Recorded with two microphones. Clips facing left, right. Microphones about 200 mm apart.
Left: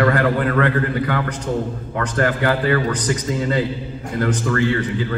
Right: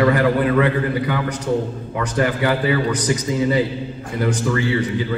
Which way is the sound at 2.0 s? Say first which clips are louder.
Even; 15° right (ahead or behind).